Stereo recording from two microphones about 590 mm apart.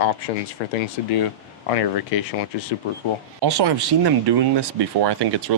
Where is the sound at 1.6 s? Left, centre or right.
Left.